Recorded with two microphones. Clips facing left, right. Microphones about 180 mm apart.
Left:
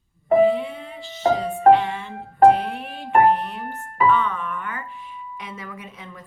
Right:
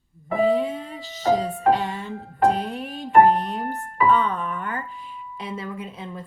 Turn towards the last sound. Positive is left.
turn(degrees=-30)  # may be behind; listen again after turning